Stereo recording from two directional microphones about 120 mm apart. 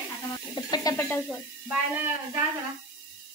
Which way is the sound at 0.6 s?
35° left (ahead or behind).